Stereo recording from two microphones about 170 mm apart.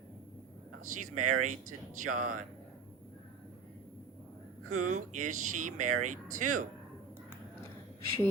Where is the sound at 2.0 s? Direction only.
45° right (ahead or behind).